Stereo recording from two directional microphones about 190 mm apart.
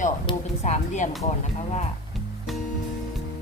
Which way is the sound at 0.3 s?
25° left (ahead or behind).